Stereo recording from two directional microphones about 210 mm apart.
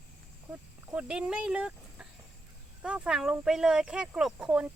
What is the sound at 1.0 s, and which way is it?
Speech, 5° right (ahead or behind).